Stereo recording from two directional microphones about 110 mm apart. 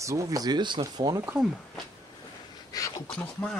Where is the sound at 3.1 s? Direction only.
5° left (ahead or behind).